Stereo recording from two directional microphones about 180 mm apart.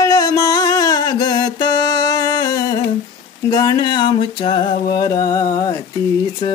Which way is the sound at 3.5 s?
20° left (ahead or behind).